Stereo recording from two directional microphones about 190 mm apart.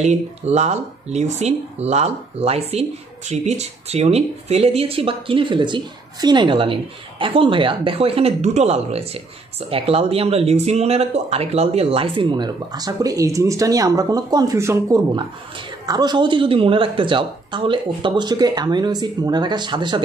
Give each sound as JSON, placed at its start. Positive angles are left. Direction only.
{"t": 0.0, "sound": "a woman's voice", "side_deg": -35}